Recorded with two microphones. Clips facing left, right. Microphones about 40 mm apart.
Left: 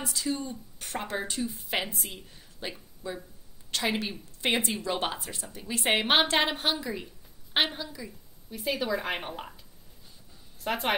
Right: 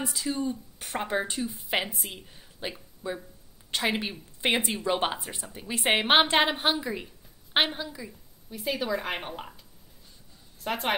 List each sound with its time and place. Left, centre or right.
0.1 s speech: centre
8.5 s speech: centre
10.6 s a woman's voice: centre